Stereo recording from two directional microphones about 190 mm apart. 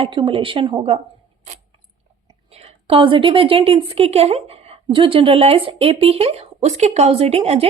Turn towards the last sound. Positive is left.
turn(degrees=-35)  # may be behind; listen again after turning